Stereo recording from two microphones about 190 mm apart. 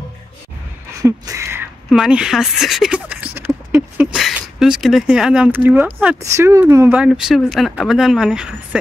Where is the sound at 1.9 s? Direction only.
5° right (ahead or behind).